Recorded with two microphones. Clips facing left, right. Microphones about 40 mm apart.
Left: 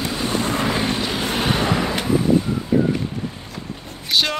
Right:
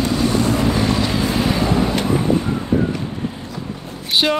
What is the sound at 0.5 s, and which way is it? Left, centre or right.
Vehicle, left.